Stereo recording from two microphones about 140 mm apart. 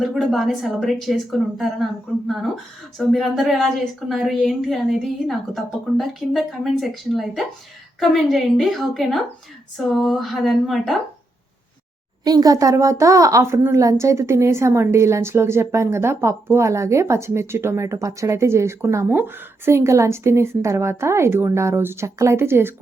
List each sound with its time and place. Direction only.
0.0 s a woman's voice: centre (ahead or behind)
12.2 s speech: 30° right (ahead or behind)